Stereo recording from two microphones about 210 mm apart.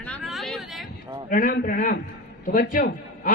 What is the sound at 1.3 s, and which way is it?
A man's voice, 40° left (ahead or behind).